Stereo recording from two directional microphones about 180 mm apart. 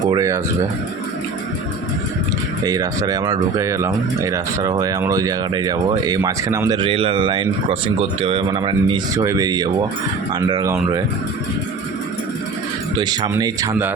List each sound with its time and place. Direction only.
0.1 s speech: 20° right (ahead or behind)
2.6 s speech: 20° right (ahead or behind)
13.0 s speech: 25° right (ahead or behind)